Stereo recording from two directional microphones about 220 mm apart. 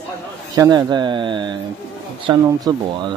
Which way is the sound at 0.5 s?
15° right (ahead or behind).